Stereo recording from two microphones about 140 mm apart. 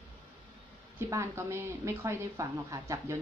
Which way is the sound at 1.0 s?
20° right (ahead or behind).